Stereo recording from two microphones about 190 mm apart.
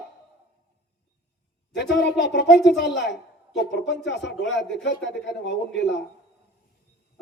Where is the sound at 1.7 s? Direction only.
65° left (ahead or behind).